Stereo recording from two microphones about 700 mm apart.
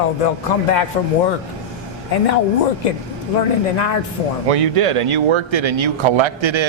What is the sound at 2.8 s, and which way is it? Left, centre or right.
Speech, left.